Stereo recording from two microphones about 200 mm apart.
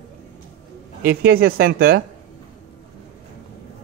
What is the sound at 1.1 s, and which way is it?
Speech, 50° right (ahead or behind).